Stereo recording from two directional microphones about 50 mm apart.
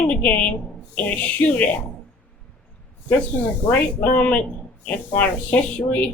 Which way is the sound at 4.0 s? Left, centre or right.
Left.